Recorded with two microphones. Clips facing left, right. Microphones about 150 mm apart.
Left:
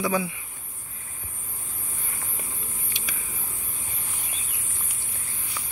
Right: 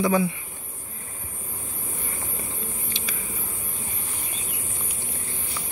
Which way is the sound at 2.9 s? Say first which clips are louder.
Right 1 dB; 15° left (ahead or behind).